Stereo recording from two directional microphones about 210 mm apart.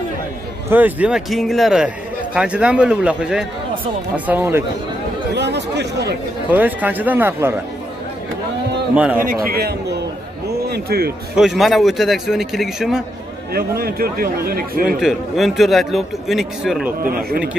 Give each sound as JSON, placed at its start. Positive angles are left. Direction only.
{"t": 0.7, "sound": "a man's voice", "side_deg": -10}
{"t": 5.3, "sound": "a man's voice", "side_deg": -55}
{"t": 6.5, "sound": "speech", "side_deg": -10}
{"t": 8.9, "sound": "a man's voice", "side_deg": -5}
{"t": 9.2, "sound": "a man's voice", "side_deg": -45}
{"t": 11.3, "sound": "a man's voice", "side_deg": 0}
{"t": 13.5, "sound": "a man's voice", "side_deg": -45}
{"t": 15.0, "sound": "a man's voice", "side_deg": 0}
{"t": 17.0, "sound": "a man's voice", "side_deg": -45}